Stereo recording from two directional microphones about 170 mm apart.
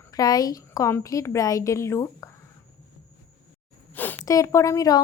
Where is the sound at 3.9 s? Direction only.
10° left (ahead or behind).